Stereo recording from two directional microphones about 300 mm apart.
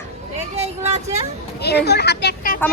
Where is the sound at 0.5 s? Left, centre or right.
Right.